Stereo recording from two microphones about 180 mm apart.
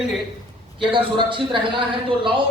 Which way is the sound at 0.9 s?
25° right (ahead or behind).